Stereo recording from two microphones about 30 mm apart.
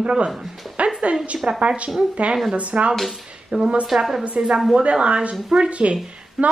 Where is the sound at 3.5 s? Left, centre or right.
Right.